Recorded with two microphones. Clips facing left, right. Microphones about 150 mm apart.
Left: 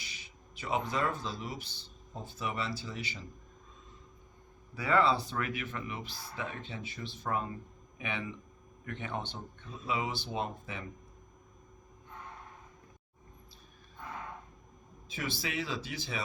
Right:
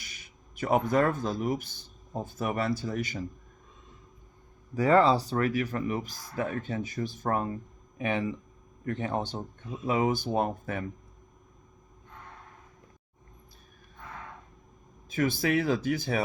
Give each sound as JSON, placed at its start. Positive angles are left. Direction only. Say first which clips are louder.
{"t": 0.0, "sound": "speech", "louder": "even", "side_deg": -50}
{"t": 4.7, "sound": "a man's voice", "louder": "right 6 dB", "side_deg": -40}
{"t": 15.1, "sound": "speech", "louder": "right 11 dB", "side_deg": -50}